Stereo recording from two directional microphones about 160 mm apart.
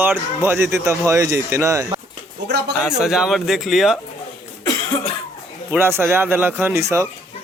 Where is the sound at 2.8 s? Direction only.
5° right (ahead or behind).